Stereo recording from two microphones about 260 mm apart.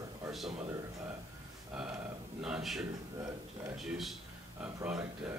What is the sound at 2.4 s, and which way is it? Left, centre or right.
Speech, centre.